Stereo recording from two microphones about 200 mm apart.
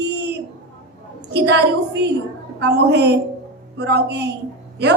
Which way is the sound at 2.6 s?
60° right (ahead or behind).